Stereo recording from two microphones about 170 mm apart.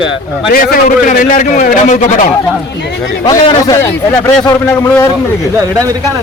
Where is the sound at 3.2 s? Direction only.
25° left (ahead or behind).